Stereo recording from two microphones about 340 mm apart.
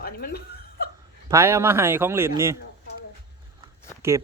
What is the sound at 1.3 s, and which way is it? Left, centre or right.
Speech, centre.